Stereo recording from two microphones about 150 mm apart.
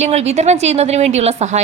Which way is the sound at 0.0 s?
50° right (ahead or behind).